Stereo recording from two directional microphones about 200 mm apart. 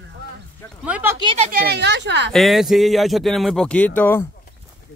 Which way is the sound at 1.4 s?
50° right (ahead or behind).